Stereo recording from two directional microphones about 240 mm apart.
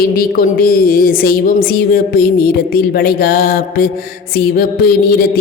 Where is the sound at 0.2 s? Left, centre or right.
Left.